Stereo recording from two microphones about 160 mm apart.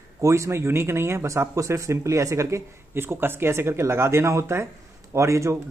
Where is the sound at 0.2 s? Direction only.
20° right (ahead or behind).